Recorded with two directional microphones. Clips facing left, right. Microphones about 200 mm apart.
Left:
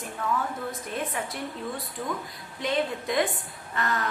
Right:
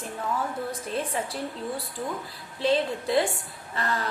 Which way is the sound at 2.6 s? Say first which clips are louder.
Right 3 dB; 30° right (ahead or behind).